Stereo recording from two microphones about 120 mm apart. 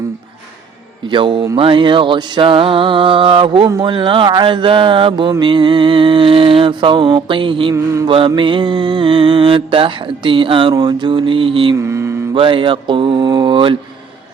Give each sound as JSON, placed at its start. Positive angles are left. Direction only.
{"t": 1.1, "sound": "music", "side_deg": -45}
{"t": 11.8, "sound": "mantra", "side_deg": -25}
{"t": 12.3, "sound": "music", "side_deg": -45}